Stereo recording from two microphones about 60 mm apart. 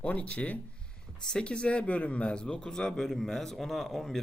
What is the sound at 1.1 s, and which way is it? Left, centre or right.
A man's voice, centre.